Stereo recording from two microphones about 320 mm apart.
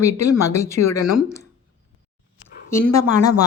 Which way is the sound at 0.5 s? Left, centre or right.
Right.